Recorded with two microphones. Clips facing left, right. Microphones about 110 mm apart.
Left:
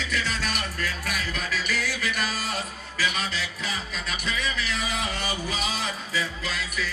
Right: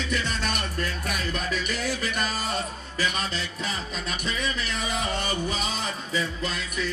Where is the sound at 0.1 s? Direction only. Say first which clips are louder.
Even; 25° right (ahead or behind).